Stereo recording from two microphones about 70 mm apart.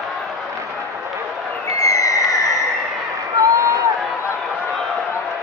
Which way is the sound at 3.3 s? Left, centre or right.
Right.